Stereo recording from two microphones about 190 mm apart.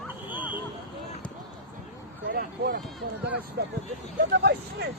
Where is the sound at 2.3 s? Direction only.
55° right (ahead or behind).